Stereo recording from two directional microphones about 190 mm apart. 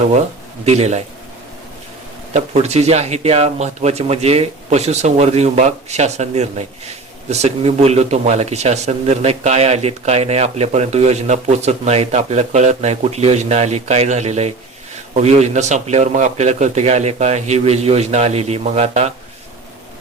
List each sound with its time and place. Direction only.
0.6 s speech: 35° right (ahead or behind)
2.3 s speech: 35° right (ahead or behind)